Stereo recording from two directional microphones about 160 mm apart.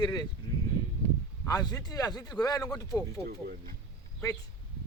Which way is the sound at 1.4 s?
25° left (ahead or behind).